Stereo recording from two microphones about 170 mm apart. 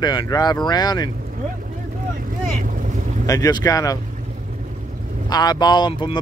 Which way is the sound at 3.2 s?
20° left (ahead or behind).